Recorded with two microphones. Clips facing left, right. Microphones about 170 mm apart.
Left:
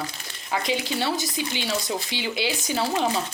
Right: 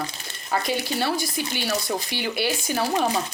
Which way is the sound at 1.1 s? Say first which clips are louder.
Right 1 dB; 20° left (ahead or behind).